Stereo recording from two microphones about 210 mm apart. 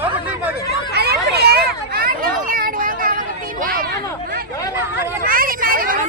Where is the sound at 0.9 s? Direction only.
50° right (ahead or behind).